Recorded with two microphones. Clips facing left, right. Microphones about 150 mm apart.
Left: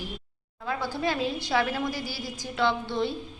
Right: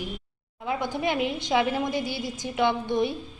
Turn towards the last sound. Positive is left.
turn(degrees=-20)  # may be behind; listen again after turning